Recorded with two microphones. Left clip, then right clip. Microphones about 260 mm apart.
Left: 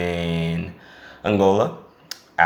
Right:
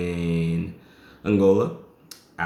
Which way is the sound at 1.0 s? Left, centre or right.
Centre.